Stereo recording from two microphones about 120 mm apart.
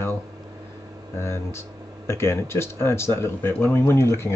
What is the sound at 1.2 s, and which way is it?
Speech, 20° left (ahead or behind).